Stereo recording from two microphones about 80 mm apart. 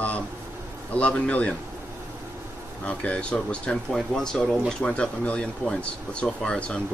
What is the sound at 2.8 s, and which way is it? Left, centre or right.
Speech, centre.